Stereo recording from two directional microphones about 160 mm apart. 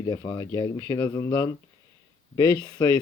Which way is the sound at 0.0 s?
25° left (ahead or behind).